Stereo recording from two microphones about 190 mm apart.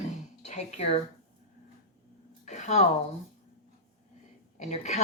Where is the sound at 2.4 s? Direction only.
40° left (ahead or behind).